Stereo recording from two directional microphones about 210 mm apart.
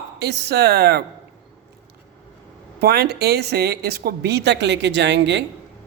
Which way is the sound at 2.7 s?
50° right (ahead or behind).